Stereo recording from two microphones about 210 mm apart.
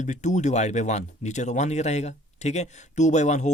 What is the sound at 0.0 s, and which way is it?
Speech, 35° left (ahead or behind).